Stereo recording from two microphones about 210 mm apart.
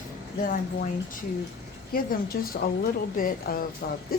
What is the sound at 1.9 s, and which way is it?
A woman's voice, 45° left (ahead or behind).